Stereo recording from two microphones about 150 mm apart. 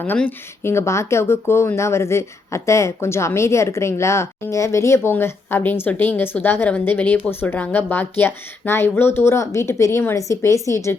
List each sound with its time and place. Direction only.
0.0 s speech: 10° left (ahead or behind)